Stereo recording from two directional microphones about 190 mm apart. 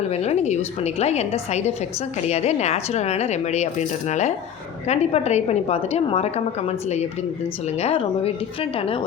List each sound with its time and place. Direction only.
0.1 s a woman's voice: 35° left (ahead or behind)